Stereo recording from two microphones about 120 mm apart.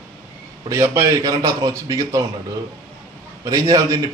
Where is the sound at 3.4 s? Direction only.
30° right (ahead or behind).